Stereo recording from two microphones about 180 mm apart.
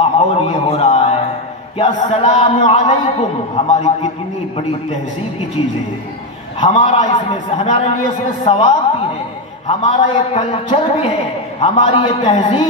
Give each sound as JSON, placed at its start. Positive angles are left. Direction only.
{"t": 0.0, "sound": "a sound", "side_deg": 30}
{"t": 1.8, "sound": "a man's voice", "side_deg": 30}
{"t": 5.6, "sound": "a man's voice", "side_deg": 30}
{"t": 7.1, "sound": "a man's voice", "side_deg": 30}